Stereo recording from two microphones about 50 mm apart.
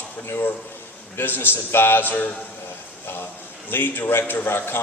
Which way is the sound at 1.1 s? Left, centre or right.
Left.